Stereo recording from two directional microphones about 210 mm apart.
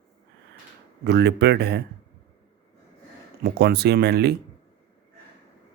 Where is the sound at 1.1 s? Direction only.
55° right (ahead or behind).